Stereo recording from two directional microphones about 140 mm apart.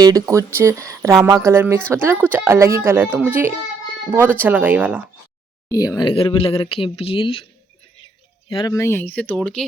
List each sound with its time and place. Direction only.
0.0 s speech: 25° right (ahead or behind)
5.6 s speech: 25° left (ahead or behind)
8.4 s speech: 35° left (ahead or behind)
8.7 s speech: 20° left (ahead or behind)